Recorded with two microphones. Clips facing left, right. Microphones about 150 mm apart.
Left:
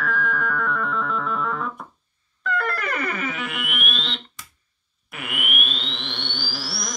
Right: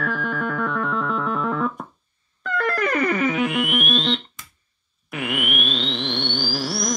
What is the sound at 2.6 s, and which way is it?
Music, 45° right (ahead or behind).